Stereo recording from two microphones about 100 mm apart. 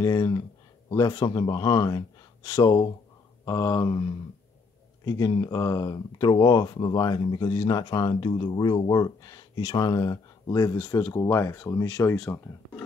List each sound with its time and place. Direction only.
0.0 s a man's voice: 40° left (ahead or behind)
5.5 s speech: 40° left (ahead or behind)